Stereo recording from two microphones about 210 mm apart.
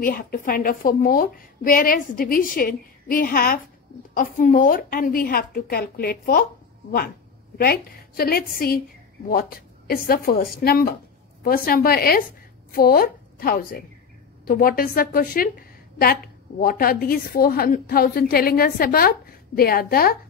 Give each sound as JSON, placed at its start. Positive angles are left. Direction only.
{"t": 0.0, "sound": "a woman's voice", "side_deg": 40}
{"t": 7.5, "sound": "a woman's voice", "side_deg": 45}